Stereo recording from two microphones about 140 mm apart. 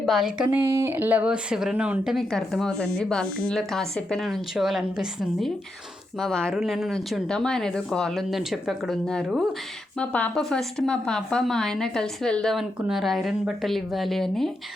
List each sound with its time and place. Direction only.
0.0 s speech: centre (ahead or behind)
0.5 s a woman's voice: 20° right (ahead or behind); by 14.5 s centre (ahead or behind)